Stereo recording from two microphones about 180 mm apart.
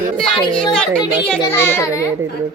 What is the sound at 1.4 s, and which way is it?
Speech, 15° left (ahead or behind).